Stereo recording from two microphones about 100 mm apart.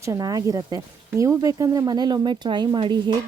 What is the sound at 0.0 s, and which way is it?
Speech, 35° right (ahead or behind).